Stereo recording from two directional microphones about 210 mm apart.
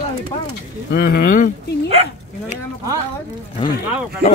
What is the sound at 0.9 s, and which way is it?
Speech, 50° left (ahead or behind).